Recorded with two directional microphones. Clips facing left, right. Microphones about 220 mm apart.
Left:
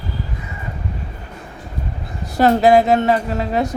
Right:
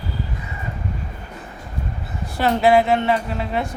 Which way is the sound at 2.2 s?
40° left (ahead or behind).